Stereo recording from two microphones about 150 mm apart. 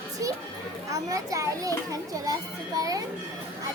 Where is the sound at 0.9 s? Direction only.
20° right (ahead or behind).